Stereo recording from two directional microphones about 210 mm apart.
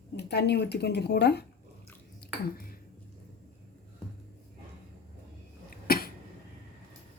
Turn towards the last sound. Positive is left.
turn(degrees=45)  # may be behind; listen again after turning